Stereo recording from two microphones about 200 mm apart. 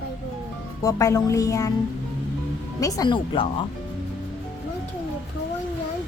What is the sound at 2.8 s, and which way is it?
Speech, 15° left (ahead or behind).